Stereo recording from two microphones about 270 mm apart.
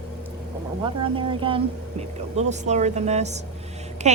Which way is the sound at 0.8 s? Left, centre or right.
Centre.